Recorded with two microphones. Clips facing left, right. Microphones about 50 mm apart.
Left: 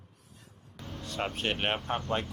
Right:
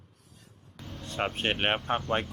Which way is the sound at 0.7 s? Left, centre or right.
Centre.